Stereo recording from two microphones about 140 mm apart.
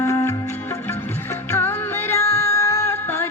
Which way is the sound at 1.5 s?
15° left (ahead or behind).